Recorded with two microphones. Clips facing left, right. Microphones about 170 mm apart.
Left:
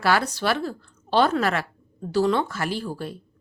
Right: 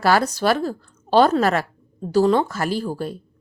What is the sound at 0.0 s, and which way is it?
A woman's voice, 40° right (ahead or behind).